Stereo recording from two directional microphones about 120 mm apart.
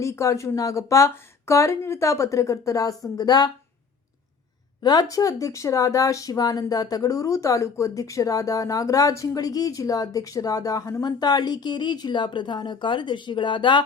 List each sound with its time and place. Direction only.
0.0 s speech: 25° left (ahead or behind)
4.8 s speech: 35° left (ahead or behind)